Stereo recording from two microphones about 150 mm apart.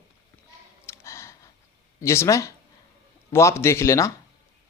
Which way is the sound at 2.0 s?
20° left (ahead or behind).